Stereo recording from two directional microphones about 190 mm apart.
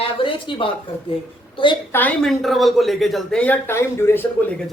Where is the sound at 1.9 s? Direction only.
10° left (ahead or behind).